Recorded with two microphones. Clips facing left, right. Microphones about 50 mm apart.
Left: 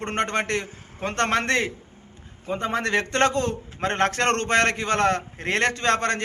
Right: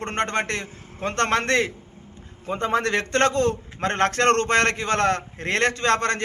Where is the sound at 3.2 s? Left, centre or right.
Right.